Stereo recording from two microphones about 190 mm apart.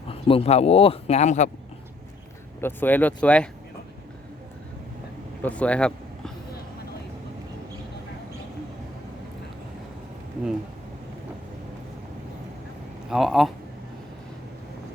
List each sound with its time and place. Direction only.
0.1 s speech: 30° left (ahead or behind)
2.6 s speech: 10° left (ahead or behind)
5.4 s vehicle: 5° left (ahead or behind)
13.1 s speech: centre (ahead or behind)